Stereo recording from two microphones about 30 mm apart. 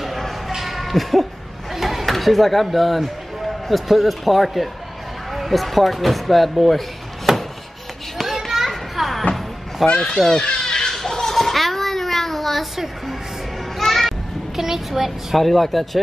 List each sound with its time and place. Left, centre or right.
0.0 s basketball bounce: centre
0.6 s a sound: centre
1.8 s chop: centre
3.9 s speech: centre
7.3 s music: centre
8.2 s children playing: centre
10.0 s speech: centre
10.8 s children playing: centre
13.7 s children playing: centre
14.6 s speech: centre